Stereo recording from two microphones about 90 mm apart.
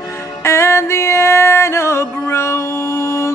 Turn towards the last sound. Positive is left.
turn(degrees=35)  # may be behind; listen again after turning